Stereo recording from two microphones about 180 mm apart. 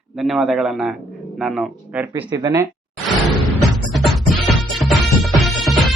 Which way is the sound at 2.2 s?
20° right (ahead or behind).